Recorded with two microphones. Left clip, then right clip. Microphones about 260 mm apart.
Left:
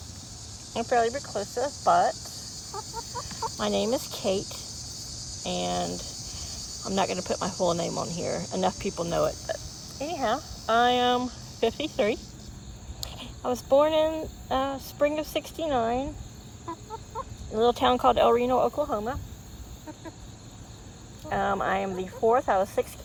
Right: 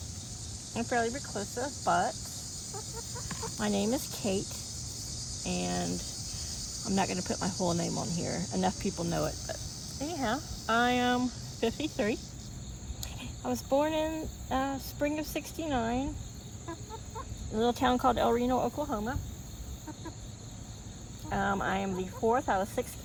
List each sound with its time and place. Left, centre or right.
0.7 s cricket: left
3.6 s speech: left
17.2 s chicken: centre
17.5 s speech: left
21.2 s speech: left